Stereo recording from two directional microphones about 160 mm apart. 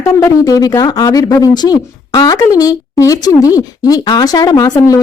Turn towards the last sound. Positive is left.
turn(degrees=20)  # may be behind; listen again after turning